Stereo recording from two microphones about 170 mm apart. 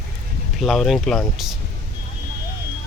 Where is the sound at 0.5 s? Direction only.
Centre (ahead or behind).